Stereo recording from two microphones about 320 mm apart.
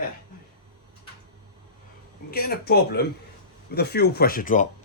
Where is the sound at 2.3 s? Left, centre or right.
Left.